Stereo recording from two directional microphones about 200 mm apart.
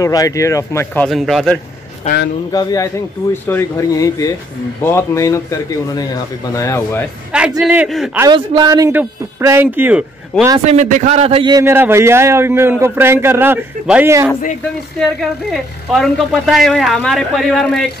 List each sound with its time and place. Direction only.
0.0 s speech: 15° left (ahead or behind)
1.0 s a woman's voice: centre (ahead or behind)
2.5 s speech: 20° left (ahead or behind)
7.6 s a woman's voice: 5° right (ahead or behind)
8.2 s a man's voice: 20° right (ahead or behind)
10.6 s a man's voice: 35° right (ahead or behind); by 14.3 s 10° right (ahead or behind)
15.0 s a woman's voice: centre (ahead or behind)